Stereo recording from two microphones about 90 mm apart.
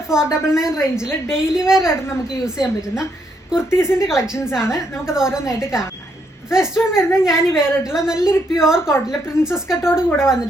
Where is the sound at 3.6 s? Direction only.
30° left (ahead or behind).